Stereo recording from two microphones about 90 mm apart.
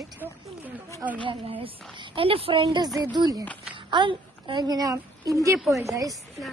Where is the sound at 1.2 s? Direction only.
80° right.